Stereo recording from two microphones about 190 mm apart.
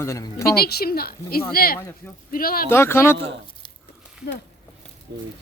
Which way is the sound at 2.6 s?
10° left (ahead or behind).